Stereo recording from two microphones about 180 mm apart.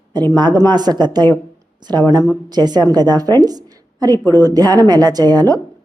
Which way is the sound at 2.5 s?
25° right (ahead or behind).